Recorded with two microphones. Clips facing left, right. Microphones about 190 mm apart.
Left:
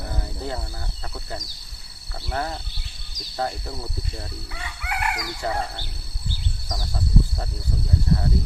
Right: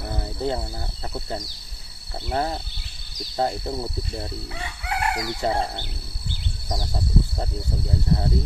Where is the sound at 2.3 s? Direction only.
25° right (ahead or behind).